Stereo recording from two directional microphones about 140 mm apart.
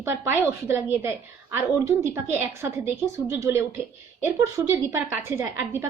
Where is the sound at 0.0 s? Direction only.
20° right (ahead or behind).